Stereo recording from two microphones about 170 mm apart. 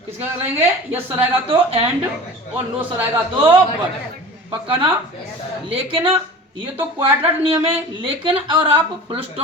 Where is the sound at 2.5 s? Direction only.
10° right (ahead or behind).